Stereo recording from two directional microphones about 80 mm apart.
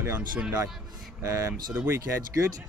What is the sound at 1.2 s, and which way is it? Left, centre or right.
Speech, right.